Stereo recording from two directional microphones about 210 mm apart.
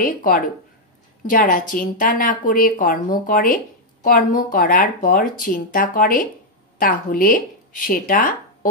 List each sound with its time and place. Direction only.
0.0 s speech: 40° left (ahead or behind)